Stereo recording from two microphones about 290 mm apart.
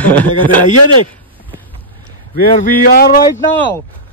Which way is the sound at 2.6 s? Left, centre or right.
Left.